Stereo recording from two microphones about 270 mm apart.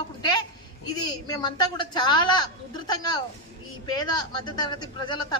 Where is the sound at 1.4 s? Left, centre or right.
Centre.